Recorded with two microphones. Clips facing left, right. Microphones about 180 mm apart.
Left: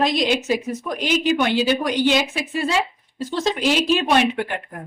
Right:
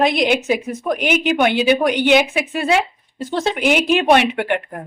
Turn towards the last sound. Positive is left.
turn(degrees=-70)  # may be behind; listen again after turning